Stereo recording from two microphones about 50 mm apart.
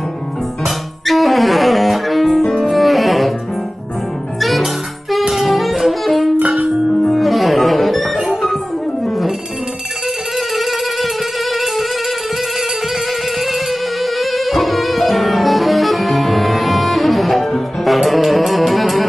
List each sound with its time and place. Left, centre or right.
0.7 s music: centre
4.4 s music: centre
6.3 s music: right
7.0 s music: centre
10.5 s music: centre
13.5 s music: centre